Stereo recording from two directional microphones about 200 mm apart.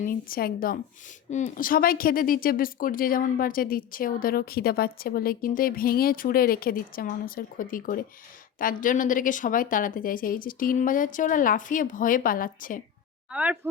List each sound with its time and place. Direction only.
0.0 s speech: 45° left (ahead or behind)
13.3 s speech: 5° right (ahead or behind)